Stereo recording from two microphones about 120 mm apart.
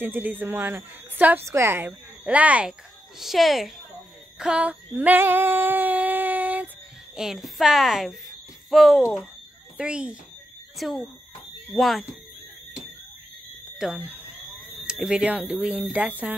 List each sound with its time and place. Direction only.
0.0 s a woman's voice: 15° right (ahead or behind)
4.4 s female singing: 10° right (ahead or behind)
7.2 s a woman's voice: 5° right (ahead or behind)
13.7 s a woman's voice: 5° right (ahead or behind)